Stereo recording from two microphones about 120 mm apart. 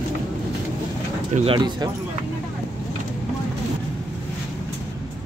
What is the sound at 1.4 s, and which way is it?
Speech, 45° right (ahead or behind).